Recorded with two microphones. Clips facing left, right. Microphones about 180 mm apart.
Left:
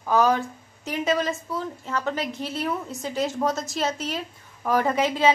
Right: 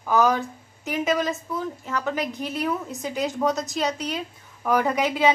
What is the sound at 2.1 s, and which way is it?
Speech, 15° right (ahead or behind).